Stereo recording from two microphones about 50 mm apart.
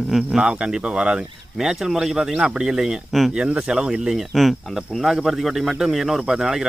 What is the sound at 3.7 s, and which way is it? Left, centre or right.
Speech, centre.